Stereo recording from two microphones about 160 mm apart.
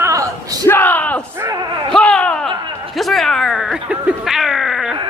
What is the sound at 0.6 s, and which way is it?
Speech, 15° left (ahead or behind).